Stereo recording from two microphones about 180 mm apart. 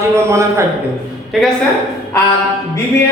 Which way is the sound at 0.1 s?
15° right (ahead or behind).